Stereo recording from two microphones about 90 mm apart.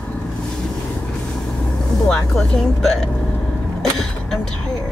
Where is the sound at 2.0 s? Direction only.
10° left (ahead or behind).